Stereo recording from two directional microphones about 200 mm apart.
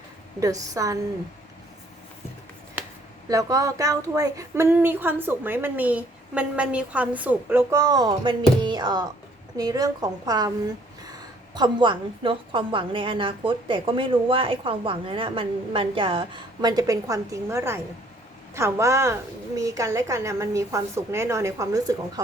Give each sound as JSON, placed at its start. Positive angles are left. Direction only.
{"t": 0.3, "sound": "a woman's voice", "side_deg": -15}
{"t": 3.2, "sound": "a woman's voice", "side_deg": -15}
{"t": 11.5, "sound": "a woman's voice", "side_deg": -20}